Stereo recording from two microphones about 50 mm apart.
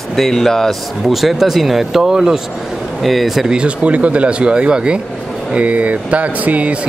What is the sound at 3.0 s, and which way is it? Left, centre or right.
Speech, centre.